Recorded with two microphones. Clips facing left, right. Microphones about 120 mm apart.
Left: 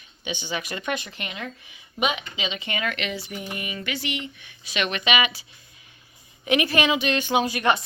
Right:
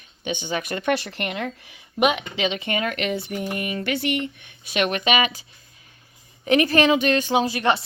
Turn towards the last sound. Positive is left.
turn(degrees=-30)  # may be behind; listen again after turning